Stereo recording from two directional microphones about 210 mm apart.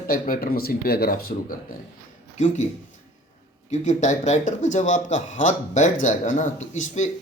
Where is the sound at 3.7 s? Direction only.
35° left (ahead or behind).